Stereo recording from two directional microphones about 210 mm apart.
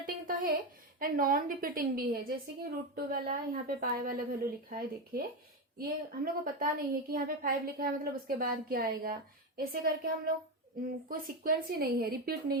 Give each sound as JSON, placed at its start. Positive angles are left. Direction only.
{"t": 0.0, "sound": "a sound", "side_deg": -40}
{"t": 0.9, "sound": "a woman's voice", "side_deg": -45}
{"t": 6.2, "sound": "a woman's voice", "side_deg": -45}